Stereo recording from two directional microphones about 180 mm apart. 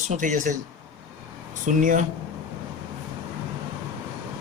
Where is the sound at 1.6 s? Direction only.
45° right (ahead or behind).